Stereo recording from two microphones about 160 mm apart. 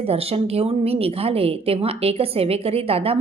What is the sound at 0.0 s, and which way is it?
A woman's voice, 40° right (ahead or behind).